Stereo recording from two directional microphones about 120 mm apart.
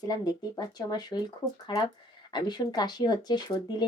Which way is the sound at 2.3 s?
35° left (ahead or behind).